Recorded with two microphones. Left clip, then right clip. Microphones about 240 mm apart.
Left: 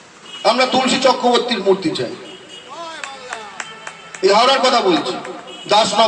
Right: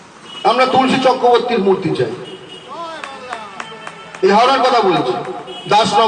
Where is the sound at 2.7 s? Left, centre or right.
Left.